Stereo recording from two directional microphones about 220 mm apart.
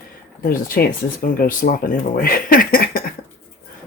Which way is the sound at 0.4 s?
40° left (ahead or behind).